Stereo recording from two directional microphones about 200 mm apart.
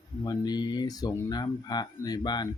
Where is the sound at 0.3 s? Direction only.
20° left (ahead or behind).